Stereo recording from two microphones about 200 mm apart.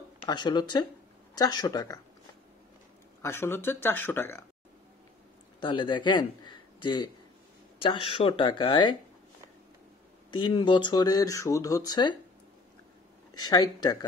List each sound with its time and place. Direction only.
0.2 s speech: 20° left (ahead or behind)
3.2 s speech: 10° left (ahead or behind)
5.6 s a man's voice: 25° left (ahead or behind)
10.3 s speech: 25° left (ahead or behind)
13.3 s speech: 20° left (ahead or behind)